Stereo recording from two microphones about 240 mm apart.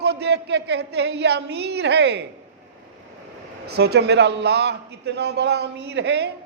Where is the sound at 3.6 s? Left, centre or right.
Right.